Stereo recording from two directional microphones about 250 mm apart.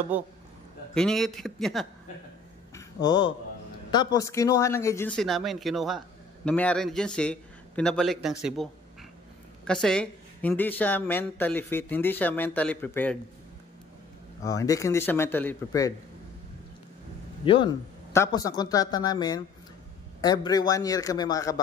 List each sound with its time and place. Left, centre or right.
0.1 s a man's voice: centre
2.7 s a sound: centre
3.9 s speech: centre
9.7 s speech: centre
14.4 s speech: centre
17.5 s speech: centre